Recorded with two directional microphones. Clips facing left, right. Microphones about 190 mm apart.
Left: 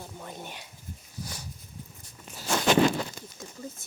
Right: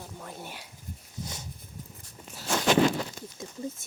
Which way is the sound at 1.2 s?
20° right (ahead or behind).